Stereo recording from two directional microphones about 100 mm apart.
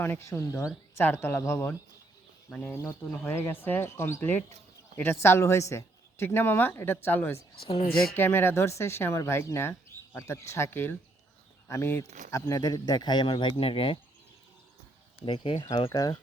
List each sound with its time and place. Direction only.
0.0 s speech: 25° left (ahead or behind)
2.5 s speech: 15° left (ahead or behind)
2.7 s speech: 30° left (ahead or behind)
7.7 s speech: 75° left (ahead or behind)
8.1 s speech: 20° left (ahead or behind); by 14.0 s 65° left (ahead or behind)
15.2 s speech: 55° left (ahead or behind)